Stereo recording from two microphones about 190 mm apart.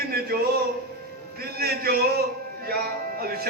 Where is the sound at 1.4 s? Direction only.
55° right (ahead or behind).